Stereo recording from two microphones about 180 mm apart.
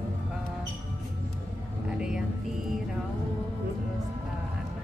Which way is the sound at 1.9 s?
5° right (ahead or behind).